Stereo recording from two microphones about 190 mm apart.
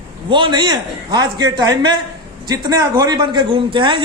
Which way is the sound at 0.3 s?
25° right (ahead or behind).